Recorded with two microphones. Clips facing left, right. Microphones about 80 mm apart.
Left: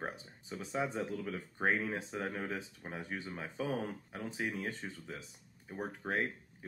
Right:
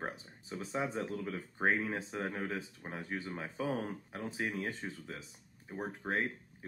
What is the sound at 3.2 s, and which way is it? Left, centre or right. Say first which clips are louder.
Speech: right 2 dB; right.